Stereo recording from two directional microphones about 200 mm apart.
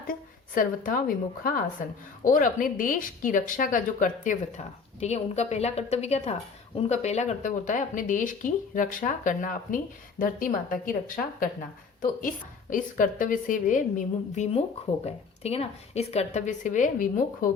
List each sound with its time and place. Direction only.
0.1 s a woman's voice: 45° left (ahead or behind)
12.7 s speech: 40° left (ahead or behind)